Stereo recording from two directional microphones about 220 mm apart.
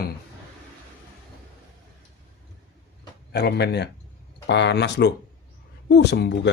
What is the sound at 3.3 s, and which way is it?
Speech, 50° left (ahead or behind).